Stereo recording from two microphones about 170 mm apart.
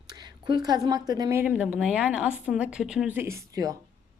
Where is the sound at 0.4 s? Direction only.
25° right (ahead or behind).